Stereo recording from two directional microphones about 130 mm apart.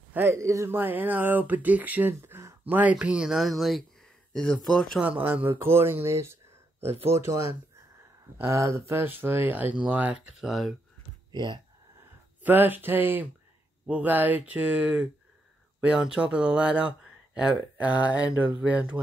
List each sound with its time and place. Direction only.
0.1 s speech: 20° right (ahead or behind); by 5.0 s 5° left (ahead or behind)
5.0 s speech: 15° right (ahead or behind)
11.3 s speech: 35° right (ahead or behind)
12.4 s speech: 15° right (ahead or behind)